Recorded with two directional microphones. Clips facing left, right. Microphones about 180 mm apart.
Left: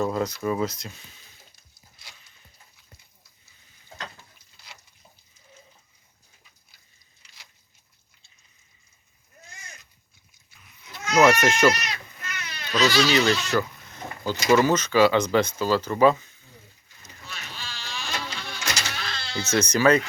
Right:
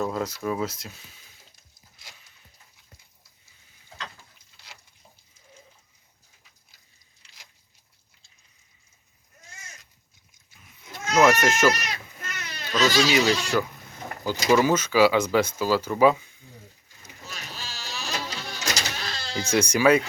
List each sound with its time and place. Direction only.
0.0 s speech: 5° right (ahead or behind)
10.8 s goat: 50° right (ahead or behind)
11.1 s speech: centre (ahead or behind)
12.2 s baby cry: 40° right (ahead or behind)
13.1 s speech: 10° right (ahead or behind)
17.2 s vehicle: 40° right (ahead or behind)
19.4 s speech: 10° right (ahead or behind)